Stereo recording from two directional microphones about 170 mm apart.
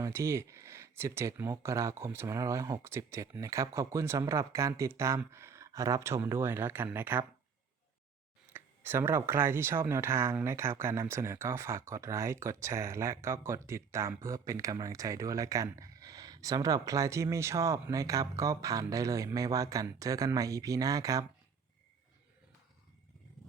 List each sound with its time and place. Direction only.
0.0 s speech: 15° right (ahead or behind)
8.5 s speech: 15° right (ahead or behind)